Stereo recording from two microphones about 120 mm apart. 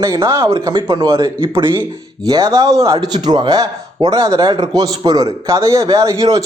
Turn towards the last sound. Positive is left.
turn(degrees=-25)  # may be behind; listen again after turning